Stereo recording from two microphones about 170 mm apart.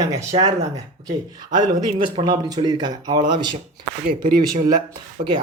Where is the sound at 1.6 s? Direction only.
25° right (ahead or behind).